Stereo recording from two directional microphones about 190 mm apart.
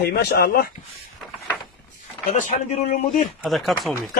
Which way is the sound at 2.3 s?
40° left (ahead or behind).